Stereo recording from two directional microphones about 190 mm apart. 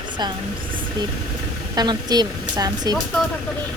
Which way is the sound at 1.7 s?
20° right (ahead or behind).